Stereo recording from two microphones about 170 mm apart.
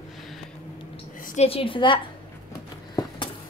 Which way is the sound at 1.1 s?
55° left (ahead or behind).